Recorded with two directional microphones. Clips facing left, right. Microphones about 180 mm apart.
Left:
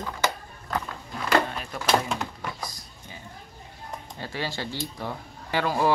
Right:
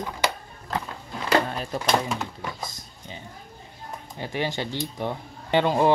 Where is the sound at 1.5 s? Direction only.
35° right (ahead or behind).